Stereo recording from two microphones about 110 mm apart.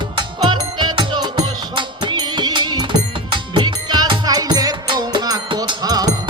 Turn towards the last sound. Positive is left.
turn(degrees=-35)  # may be behind; listen again after turning